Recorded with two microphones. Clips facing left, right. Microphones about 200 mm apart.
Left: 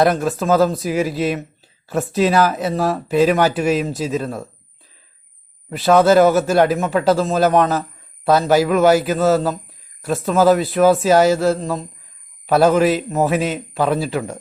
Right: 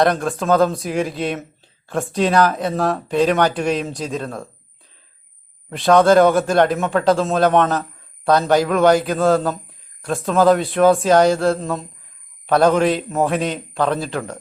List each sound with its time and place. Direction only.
0.0 s speech: 5° left (ahead or behind)
5.7 s speech: 5° left (ahead or behind)